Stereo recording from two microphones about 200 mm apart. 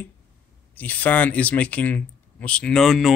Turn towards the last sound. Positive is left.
turn(degrees=0)  # may be behind; listen again after turning